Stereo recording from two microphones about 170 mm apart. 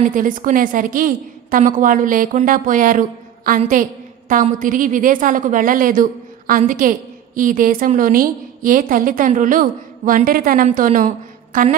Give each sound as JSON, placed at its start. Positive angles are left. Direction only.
{"t": 0.0, "sound": "a woman's voice", "side_deg": -50}